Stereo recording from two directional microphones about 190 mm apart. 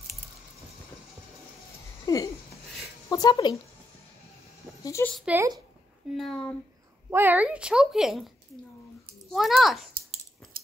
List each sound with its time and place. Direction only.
2.1 s a sound: 20° left (ahead or behind)
3.1 s speech: 20° left (ahead or behind)
4.8 s a sound: 15° left (ahead or behind)
5.1 s speech: 5° right (ahead or behind)
7.1 s speech: 10° right (ahead or behind)
9.3 s speech: centre (ahead or behind)